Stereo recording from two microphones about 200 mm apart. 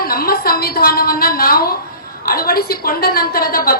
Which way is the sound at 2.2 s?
50° left (ahead or behind).